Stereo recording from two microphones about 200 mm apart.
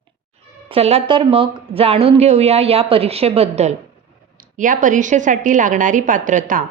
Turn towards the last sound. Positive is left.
turn(degrees=-40)  # may be behind; listen again after turning